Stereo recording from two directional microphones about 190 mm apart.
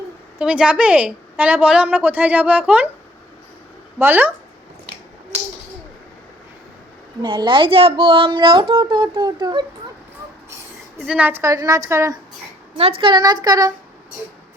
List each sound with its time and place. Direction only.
0.3 s a woman's voice: 5° right (ahead or behind)
3.9 s a woman's voice: 10° right (ahead or behind)
7.2 s speech: 25° right (ahead or behind)
11.0 s a woman's voice: 5° right (ahead or behind)